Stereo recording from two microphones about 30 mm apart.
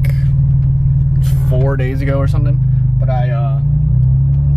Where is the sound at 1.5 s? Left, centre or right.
Centre.